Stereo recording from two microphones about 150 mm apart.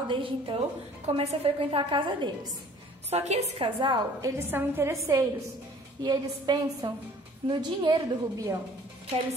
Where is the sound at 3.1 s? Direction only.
45° right (ahead or behind).